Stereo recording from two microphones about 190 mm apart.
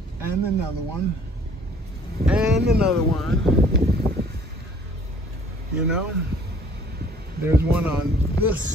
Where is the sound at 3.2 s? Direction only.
Centre (ahead or behind).